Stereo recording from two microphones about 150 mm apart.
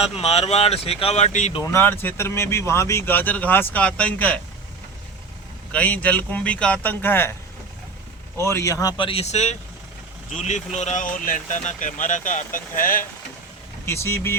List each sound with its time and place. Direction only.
0.0 s speech: 45° left (ahead or behind)
1.6 s speech: 15° left (ahead or behind)
5.7 s speech: 10° left (ahead or behind)
8.4 s speech: 20° left (ahead or behind); by 13.1 s 65° left (ahead or behind)
13.8 s speech: 20° left (ahead or behind)